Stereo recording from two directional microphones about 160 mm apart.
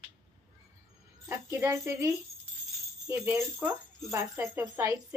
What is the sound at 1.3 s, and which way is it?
Speech, 15° right (ahead or behind).